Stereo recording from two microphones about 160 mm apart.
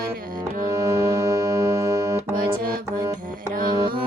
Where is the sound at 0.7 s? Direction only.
20° right (ahead or behind).